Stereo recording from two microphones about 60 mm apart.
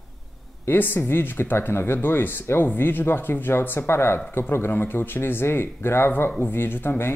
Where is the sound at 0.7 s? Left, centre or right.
Left.